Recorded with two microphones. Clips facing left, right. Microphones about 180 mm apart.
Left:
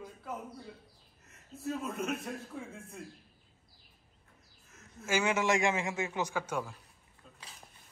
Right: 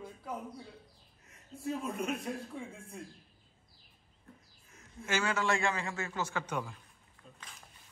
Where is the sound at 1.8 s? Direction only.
Centre (ahead or behind).